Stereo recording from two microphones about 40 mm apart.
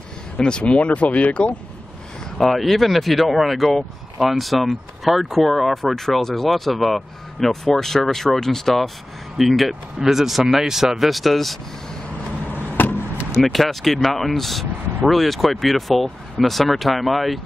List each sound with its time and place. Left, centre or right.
0.4 s speech: left
0.7 s speech: left
2.3 s speech: centre
12.8 s vehicle: left
13.4 s speech: centre